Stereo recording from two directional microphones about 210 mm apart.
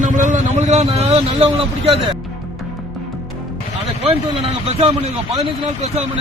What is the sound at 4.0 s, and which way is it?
A man's voice, 30° right (ahead or behind).